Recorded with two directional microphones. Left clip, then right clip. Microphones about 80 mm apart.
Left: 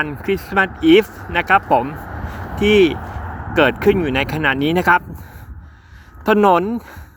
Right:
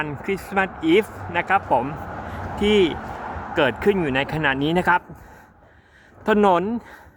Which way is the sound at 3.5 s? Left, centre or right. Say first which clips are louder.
Left 5 dB; left.